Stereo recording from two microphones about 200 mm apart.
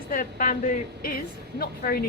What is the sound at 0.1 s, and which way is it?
A woman's voice, 40° left (ahead or behind).